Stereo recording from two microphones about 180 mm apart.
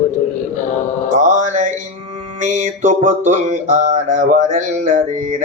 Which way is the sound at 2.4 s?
40° right (ahead or behind).